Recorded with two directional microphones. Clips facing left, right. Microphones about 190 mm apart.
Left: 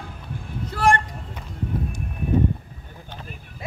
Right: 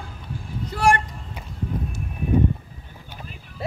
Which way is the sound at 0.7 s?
10° right (ahead or behind).